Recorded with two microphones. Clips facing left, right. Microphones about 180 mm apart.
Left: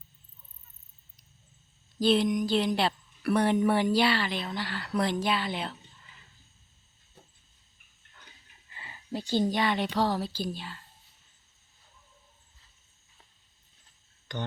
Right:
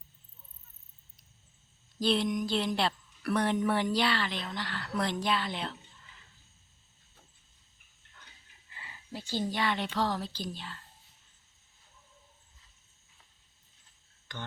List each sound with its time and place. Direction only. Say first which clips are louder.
2.0 s speech: left 4 dB; centre (ahead or behind)
8.7 s a sound: left 7 dB; 30° left (ahead or behind)
9.5 s a woman's voice: left 4 dB; 15° left (ahead or behind)
14.3 s a woman's voice: left 7 dB; 15° left (ahead or behind)